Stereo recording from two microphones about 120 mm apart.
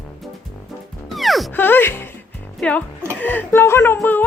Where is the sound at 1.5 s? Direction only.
15° left (ahead or behind).